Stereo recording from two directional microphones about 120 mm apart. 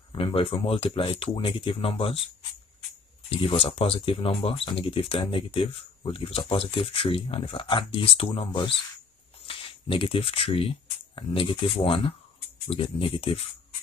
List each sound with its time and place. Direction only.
0.1 s speech: 50° left (ahead or behind)
3.3 s speech: 50° left (ahead or behind)
8.5 s speech: 40° left (ahead or behind)